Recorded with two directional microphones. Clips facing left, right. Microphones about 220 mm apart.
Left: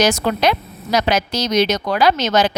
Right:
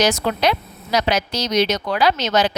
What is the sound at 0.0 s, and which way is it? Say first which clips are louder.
A woman's voice: left 2 dB; 45° left (ahead or behind).